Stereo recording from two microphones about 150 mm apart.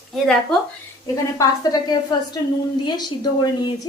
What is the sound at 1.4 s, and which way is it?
Speech, 25° left (ahead or behind).